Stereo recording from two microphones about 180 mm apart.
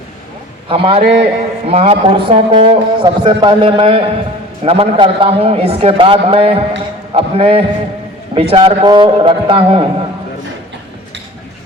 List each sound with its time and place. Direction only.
0.7 s a man's voice: 30° right (ahead or behind)